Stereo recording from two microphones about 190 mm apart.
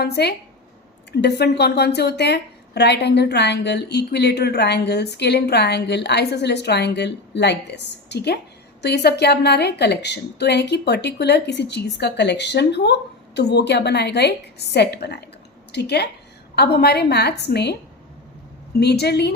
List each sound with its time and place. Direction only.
0.0 s a woman's voice: 60° left (ahead or behind)
18.8 s a woman's voice: 60° left (ahead or behind)